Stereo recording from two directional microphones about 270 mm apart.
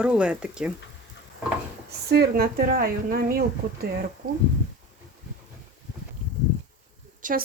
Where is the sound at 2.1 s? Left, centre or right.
Right.